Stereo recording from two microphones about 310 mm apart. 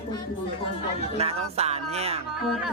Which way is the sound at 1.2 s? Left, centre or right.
Centre.